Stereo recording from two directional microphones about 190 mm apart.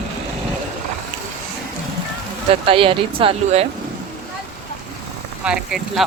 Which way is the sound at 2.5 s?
30° right (ahead or behind).